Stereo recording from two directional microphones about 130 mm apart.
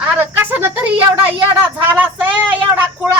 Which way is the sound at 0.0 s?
15° right (ahead or behind).